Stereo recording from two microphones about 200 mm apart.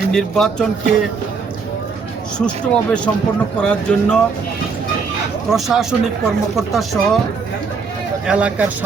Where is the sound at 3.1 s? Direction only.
10° left (ahead or behind).